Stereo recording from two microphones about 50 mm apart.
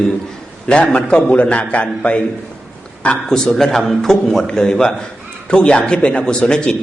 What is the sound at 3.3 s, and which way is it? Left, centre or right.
Speech, centre.